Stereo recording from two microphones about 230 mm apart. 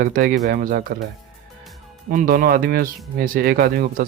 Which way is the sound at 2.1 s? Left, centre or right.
Right.